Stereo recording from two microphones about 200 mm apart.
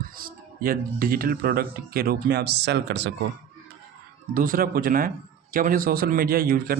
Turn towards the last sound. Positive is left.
turn(degrees=-50)  # may be behind; listen again after turning